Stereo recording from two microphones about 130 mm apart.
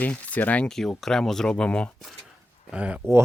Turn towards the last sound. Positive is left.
turn(degrees=-10)  # may be behind; listen again after turning